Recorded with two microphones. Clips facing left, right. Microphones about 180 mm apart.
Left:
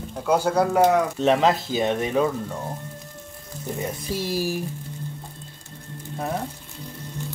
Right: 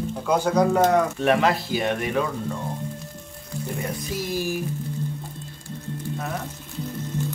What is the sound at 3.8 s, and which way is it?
Speech, 30° left (ahead or behind).